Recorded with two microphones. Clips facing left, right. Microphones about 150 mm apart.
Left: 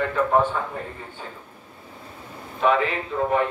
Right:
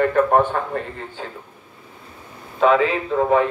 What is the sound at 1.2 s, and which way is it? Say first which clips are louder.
Speech: right 5 dB; 90° right.